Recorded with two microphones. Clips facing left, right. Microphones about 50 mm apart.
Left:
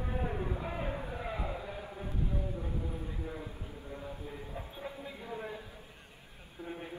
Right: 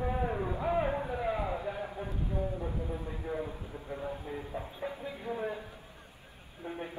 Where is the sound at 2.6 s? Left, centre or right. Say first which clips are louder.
Right 3 dB; right.